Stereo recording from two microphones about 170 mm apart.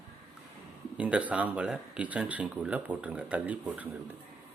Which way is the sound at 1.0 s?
5° right (ahead or behind).